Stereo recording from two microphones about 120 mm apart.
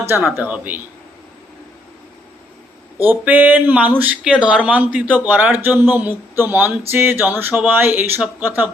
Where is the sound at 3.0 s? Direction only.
15° right (ahead or behind).